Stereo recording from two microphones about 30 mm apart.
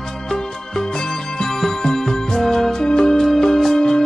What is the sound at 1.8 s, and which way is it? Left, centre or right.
Music, centre.